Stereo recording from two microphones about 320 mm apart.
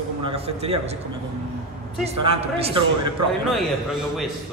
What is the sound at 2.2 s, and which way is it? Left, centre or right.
Speech, centre.